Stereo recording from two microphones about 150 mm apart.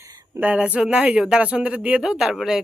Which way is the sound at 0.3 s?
10° right (ahead or behind).